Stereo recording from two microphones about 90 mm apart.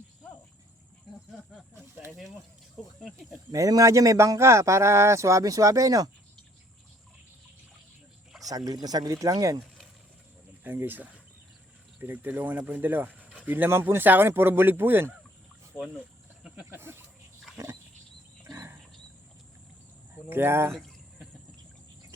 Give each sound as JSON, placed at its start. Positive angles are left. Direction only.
{"t": 2.0, "sound": "speech", "side_deg": 0}
{"t": 3.5, "sound": "speech", "side_deg": -40}
{"t": 8.4, "sound": "speech", "side_deg": -45}
{"t": 10.6, "sound": "speech", "side_deg": -20}
{"t": 15.7, "sound": "speech", "side_deg": 20}
{"t": 16.6, "sound": "a sound", "side_deg": -25}
{"t": 20.3, "sound": "speech", "side_deg": -25}
{"t": 20.7, "sound": "a sound", "side_deg": 5}